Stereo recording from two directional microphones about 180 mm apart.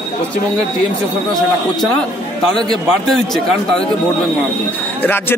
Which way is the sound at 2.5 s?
Centre (ahead or behind).